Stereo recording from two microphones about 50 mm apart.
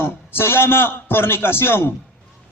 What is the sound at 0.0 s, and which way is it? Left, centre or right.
A man's voice, left.